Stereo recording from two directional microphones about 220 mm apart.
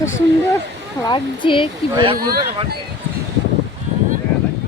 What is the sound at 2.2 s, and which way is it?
Speech, 45° right (ahead or behind).